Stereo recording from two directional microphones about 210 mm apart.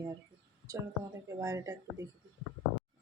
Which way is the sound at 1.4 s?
15° right (ahead or behind).